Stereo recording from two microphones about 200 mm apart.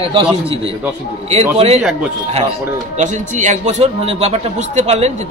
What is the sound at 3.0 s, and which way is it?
A man's voice, 40° right (ahead or behind).